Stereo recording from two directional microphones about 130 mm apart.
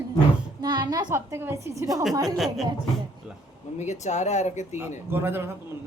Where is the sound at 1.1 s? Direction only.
20° right (ahead or behind).